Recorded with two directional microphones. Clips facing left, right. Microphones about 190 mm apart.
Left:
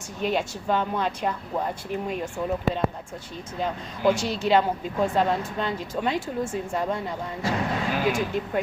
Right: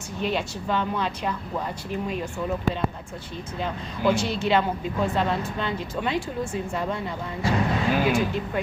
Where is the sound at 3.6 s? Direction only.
40° left (ahead or behind).